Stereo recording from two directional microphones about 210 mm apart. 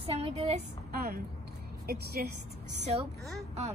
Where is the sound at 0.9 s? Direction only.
45° right (ahead or behind).